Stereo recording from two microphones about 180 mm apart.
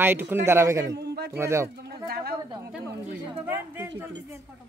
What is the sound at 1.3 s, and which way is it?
Speech, 15° right (ahead or behind).